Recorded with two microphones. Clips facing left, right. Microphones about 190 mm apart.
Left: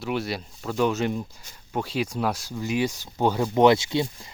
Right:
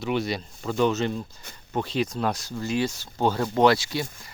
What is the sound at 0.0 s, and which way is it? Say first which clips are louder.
Speech: right 2 dB; 5° left (ahead or behind).